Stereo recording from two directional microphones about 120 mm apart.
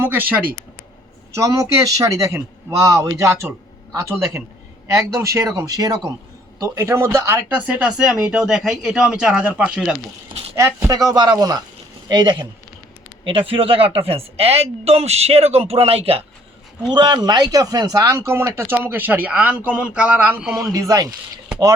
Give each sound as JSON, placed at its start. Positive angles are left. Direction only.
{"t": 0.0, "sound": "speech", "side_deg": -15}
{"t": 1.4, "sound": "speech", "side_deg": -30}
{"t": 6.6, "sound": "speech", "side_deg": -25}
{"t": 10.5, "sound": "speech", "side_deg": -20}
{"t": 10.9, "sound": "speech", "side_deg": -30}
{"t": 16.9, "sound": "speech", "side_deg": -40}
{"t": 20.4, "sound": "speech", "side_deg": -5}
{"t": 20.7, "sound": "speech", "side_deg": -30}